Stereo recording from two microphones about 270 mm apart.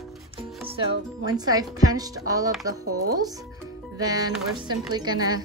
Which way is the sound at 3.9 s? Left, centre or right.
Centre.